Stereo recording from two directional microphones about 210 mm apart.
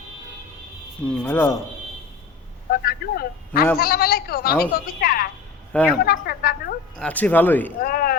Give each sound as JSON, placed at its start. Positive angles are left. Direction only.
{"t": 1.0, "sound": "speech", "side_deg": 5}
{"t": 2.6, "sound": "a man's voice", "side_deg": 45}
{"t": 5.7, "sound": "a woman's voice", "side_deg": 5}
{"t": 6.1, "sound": "a woman's voice", "side_deg": 45}
{"t": 6.9, "sound": "speech", "side_deg": 5}
{"t": 7.8, "sound": "a woman's voice", "side_deg": 45}